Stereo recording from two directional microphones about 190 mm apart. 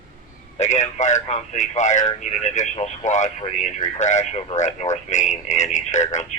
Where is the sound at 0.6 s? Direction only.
35° left (ahead or behind).